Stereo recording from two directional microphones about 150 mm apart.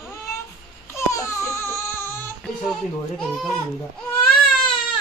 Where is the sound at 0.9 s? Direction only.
20° left (ahead or behind).